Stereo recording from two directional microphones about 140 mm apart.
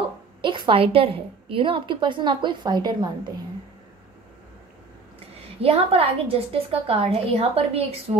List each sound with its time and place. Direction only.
0.4 s a woman's voice: 35° right (ahead or behind)
5.6 s a woman's voice: 45° right (ahead or behind)